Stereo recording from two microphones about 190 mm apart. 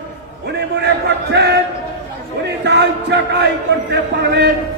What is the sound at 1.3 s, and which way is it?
Speech, 60° right (ahead or behind).